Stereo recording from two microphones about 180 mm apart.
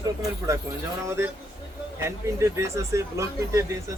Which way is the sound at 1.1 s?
15° right (ahead or behind).